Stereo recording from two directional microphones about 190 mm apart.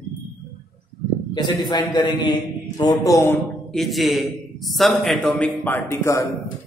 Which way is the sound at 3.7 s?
Centre (ahead or behind).